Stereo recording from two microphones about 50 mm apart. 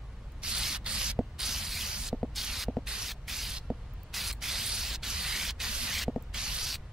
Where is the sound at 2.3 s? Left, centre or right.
Centre.